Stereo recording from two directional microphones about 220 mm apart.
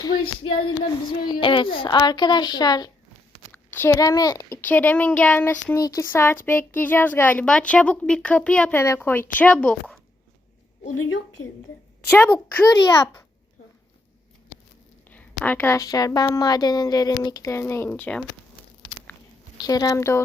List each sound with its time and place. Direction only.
0.1 s a sound: 40° left (ahead or behind)
1.2 s a woman's voice: 20° left (ahead or behind); by 10.0 s 5° left (ahead or behind)
12.1 s a child's voice: 10° left (ahead or behind)
15.1 s a child's voice: 5° left (ahead or behind)
19.5 s a child's voice: 15° left (ahead or behind)